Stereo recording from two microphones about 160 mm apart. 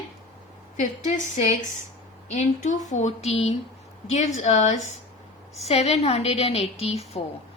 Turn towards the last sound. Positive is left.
turn(degrees=40)  # may be behind; listen again after turning